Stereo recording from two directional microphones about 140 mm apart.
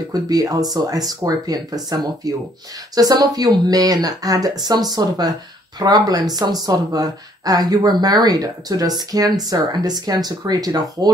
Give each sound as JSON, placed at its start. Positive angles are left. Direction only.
{"t": 0.1, "sound": "speech", "side_deg": -25}